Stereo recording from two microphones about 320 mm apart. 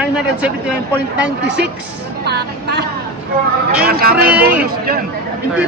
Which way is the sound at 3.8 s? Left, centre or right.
Right.